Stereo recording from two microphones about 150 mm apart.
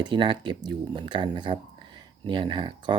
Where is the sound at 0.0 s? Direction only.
30° right (ahead or behind).